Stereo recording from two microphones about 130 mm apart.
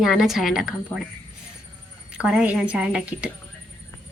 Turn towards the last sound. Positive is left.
turn(degrees=-10)  # may be behind; listen again after turning